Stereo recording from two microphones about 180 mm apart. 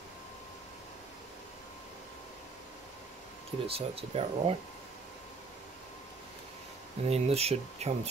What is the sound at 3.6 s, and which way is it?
Speech, 30° right (ahead or behind).